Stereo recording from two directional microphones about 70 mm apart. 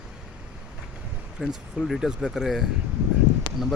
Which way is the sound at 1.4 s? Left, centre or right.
Centre.